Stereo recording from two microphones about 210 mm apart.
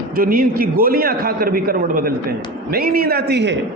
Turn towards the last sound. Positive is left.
turn(degrees=-55)  # may be behind; listen again after turning